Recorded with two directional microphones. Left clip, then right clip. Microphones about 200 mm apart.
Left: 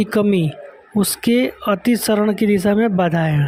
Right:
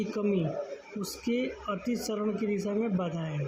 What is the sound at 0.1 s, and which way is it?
Speech, 50° left (ahead or behind).